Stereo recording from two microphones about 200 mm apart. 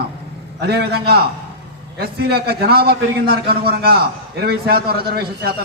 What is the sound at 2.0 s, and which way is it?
A man's voice, 50° right (ahead or behind).